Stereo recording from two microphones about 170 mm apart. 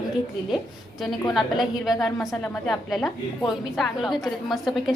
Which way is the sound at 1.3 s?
Centre (ahead or behind).